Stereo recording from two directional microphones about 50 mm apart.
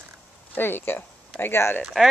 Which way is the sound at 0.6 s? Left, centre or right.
Left.